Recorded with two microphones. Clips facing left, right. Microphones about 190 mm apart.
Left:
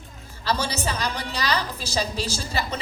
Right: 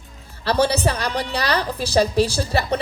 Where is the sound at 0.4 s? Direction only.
60° right (ahead or behind).